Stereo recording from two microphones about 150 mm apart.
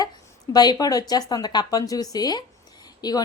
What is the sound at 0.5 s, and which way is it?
A woman's voice, 25° left (ahead or behind).